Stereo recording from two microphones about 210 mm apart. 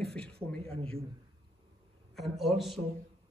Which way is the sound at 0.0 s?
5° left (ahead or behind).